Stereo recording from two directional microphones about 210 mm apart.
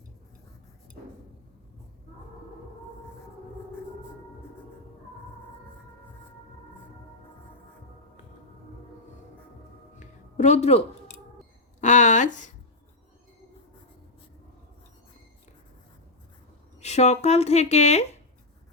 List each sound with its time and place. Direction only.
10.0 s a sound: 35° left (ahead or behind)
11.8 s speech: 35° left (ahead or behind)
16.8 s speech: 30° left (ahead or behind)